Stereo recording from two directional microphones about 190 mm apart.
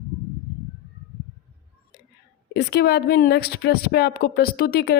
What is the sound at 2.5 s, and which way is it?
A woman's voice, 60° left (ahead or behind).